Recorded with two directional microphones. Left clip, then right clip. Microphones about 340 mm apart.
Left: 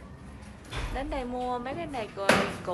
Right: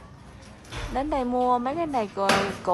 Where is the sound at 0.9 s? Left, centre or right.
Centre.